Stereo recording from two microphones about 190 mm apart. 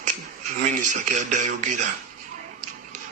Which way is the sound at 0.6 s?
40° right (ahead or behind).